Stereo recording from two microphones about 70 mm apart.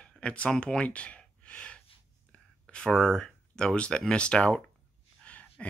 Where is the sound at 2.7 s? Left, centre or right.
Centre.